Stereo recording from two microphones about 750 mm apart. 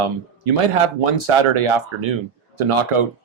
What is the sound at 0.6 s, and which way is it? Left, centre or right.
Speech, right.